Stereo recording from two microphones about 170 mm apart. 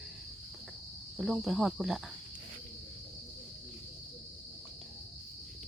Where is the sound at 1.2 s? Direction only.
Centre (ahead or behind).